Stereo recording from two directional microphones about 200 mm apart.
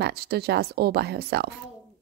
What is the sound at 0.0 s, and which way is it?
Speech, 55° right (ahead or behind).